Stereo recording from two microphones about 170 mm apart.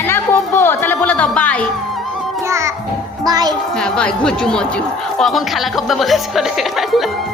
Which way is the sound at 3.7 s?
5° left (ahead or behind).